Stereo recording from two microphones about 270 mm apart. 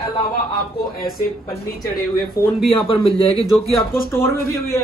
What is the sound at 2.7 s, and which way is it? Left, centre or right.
A man's voice, centre.